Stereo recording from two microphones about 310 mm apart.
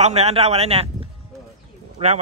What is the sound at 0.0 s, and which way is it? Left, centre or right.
Speech, right.